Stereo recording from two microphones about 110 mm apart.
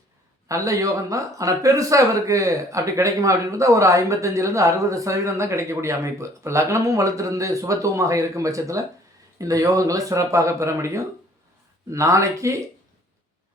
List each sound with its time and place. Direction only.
0.4 s speech: 30° right (ahead or behind)